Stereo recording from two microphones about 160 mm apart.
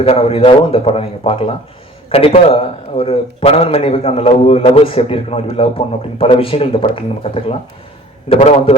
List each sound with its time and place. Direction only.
0.0 s a man's voice: 35° left (ahead or behind)